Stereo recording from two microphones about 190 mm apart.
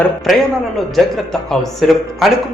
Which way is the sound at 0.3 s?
Centre (ahead or behind).